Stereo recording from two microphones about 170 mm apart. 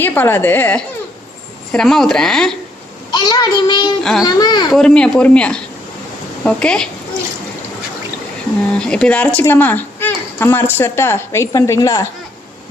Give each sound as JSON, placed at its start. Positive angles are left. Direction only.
{"t": 0.0, "sound": "speech", "side_deg": 10}
{"t": 3.1, "sound": "child singing", "side_deg": 25}
{"t": 4.0, "sound": "speech", "side_deg": 0}
{"t": 4.3, "sound": "child singing", "side_deg": 25}
{"t": 4.7, "sound": "speech", "side_deg": 5}
{"t": 8.8, "sound": "speech", "side_deg": 5}